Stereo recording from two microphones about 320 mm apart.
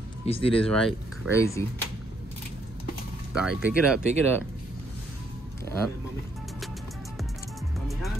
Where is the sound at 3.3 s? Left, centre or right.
Centre.